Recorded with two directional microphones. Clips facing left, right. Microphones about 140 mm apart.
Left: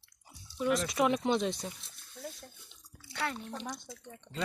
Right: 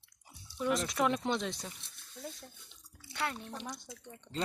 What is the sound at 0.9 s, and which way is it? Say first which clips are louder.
Speech: left 3 dB; 15° left (ahead or behind).